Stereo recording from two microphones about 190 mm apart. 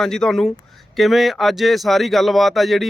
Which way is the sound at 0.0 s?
Centre (ahead or behind).